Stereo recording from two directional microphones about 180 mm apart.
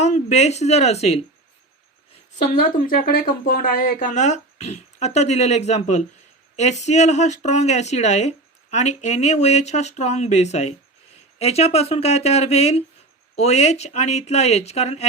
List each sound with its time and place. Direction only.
0.0 s speech: 40° left (ahead or behind)
2.6 s speech: 50° left (ahead or behind)